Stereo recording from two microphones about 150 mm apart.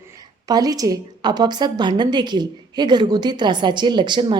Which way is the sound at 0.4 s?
25° right (ahead or behind).